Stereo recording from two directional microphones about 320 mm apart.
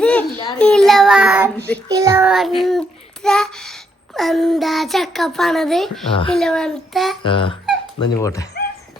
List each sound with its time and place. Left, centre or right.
0.0 s child singing: centre
7.3 s speech: centre